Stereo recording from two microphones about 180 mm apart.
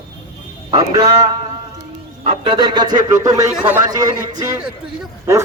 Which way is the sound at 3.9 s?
20° right (ahead or behind).